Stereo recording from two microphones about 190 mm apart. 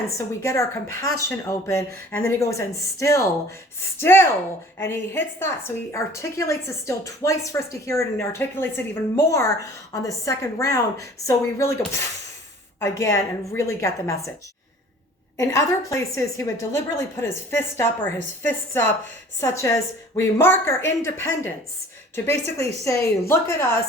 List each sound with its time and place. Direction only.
0.4 s a woman's voice: 15° left (ahead or behind)
12.8 s a woman's voice: 15° left (ahead or behind)
15.4 s a woman's voice: 15° left (ahead or behind)